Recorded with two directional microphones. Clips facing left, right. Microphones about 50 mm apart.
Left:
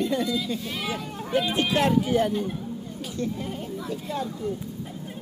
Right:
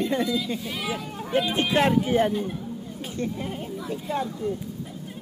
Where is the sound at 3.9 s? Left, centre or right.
Right.